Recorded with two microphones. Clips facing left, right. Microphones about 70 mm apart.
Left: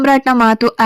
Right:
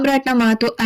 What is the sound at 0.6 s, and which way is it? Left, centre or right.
Speech, left.